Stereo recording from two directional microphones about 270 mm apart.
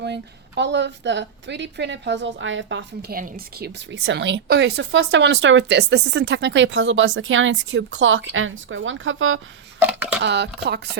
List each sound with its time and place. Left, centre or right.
0.0 s a woman's voice: right
9.8 s a sound: centre
10.2 s a woman's voice: right